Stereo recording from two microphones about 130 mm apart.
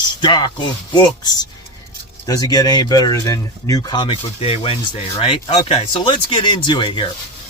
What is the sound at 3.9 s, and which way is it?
Speech, 40° left (ahead or behind).